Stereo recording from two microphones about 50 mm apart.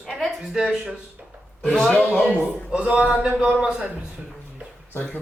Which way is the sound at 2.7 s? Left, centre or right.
Right.